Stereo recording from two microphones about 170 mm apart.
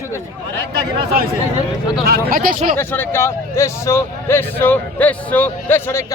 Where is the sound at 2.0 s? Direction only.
60° right (ahead or behind).